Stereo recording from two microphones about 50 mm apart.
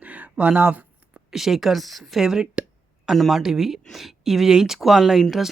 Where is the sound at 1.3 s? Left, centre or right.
Centre.